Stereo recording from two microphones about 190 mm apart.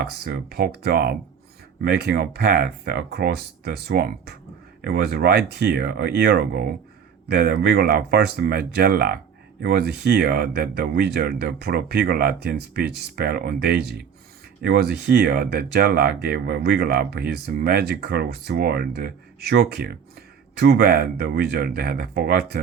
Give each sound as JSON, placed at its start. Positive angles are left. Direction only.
{"t": 0.3, "sound": "speech", "side_deg": -55}